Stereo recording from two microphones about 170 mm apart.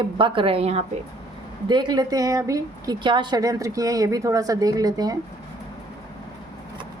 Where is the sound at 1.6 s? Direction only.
25° right (ahead or behind).